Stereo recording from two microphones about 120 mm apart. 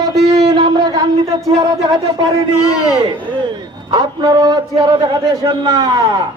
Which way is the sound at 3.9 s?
35° right (ahead or behind).